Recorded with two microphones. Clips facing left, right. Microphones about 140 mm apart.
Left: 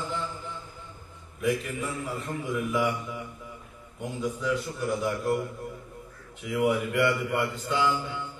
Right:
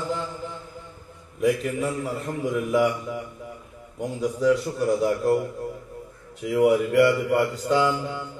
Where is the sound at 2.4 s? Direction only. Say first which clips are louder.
Right 6 dB; 40° right (ahead or behind).